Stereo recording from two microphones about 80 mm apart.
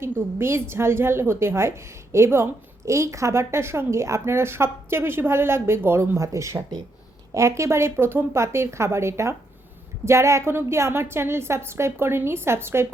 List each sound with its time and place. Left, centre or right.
0.0 s a woman's voice: right